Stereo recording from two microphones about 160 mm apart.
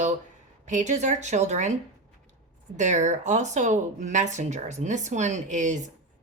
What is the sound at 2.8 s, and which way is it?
Speech, 50° right (ahead or behind).